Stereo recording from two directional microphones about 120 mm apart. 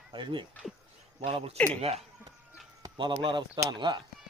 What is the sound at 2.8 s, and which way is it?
Speech, 40° right (ahead or behind).